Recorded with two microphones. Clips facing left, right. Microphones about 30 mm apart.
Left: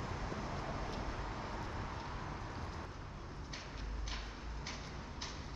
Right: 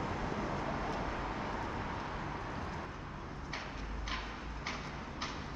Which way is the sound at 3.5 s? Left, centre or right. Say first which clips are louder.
Right 7 dB; centre.